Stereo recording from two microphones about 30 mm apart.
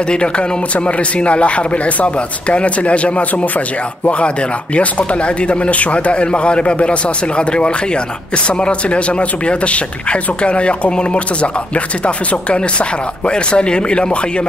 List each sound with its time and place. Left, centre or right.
0.1 s speech: left
4.7 s speech: left